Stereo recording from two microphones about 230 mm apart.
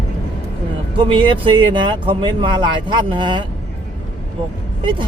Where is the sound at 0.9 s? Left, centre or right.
Right.